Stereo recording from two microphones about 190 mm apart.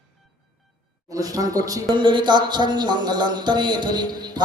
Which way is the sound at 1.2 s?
20° right (ahead or behind).